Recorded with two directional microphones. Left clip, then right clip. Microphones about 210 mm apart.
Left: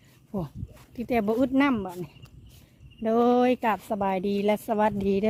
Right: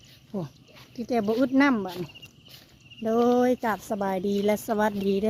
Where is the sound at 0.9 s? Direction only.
30° left (ahead or behind).